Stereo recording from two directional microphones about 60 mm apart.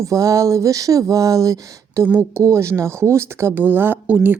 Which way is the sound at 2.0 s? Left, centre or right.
Right.